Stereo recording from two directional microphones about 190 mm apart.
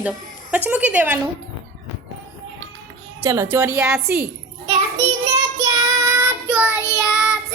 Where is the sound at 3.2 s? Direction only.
15° right (ahead or behind).